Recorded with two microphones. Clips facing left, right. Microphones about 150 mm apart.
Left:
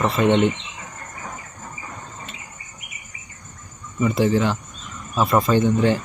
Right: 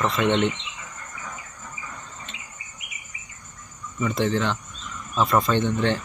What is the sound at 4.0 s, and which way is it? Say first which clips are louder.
Speech: left 5 dB; 10° left (ahead or behind).